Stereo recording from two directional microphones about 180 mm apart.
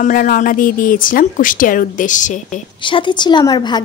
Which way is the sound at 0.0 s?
50° left (ahead or behind).